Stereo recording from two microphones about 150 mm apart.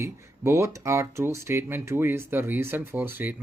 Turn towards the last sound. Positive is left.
turn(degrees=-15)  # may be behind; listen again after turning